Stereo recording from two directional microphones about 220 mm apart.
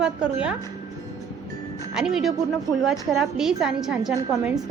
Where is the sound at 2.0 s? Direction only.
Centre (ahead or behind).